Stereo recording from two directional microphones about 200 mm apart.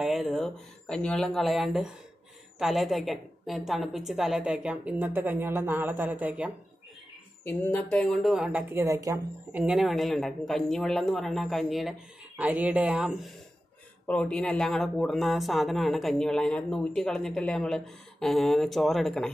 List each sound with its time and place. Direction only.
0.0 s speech: centre (ahead or behind)
7.4 s speech: 10° left (ahead or behind)